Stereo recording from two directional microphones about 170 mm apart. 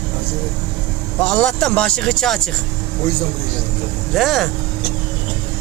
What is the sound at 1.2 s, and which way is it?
Speech, 5° left (ahead or behind).